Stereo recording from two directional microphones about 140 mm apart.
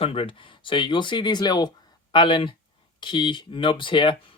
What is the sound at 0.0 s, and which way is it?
Speech, 40° left (ahead or behind).